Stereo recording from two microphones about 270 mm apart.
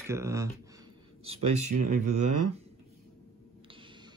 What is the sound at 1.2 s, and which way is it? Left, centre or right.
Speech, right.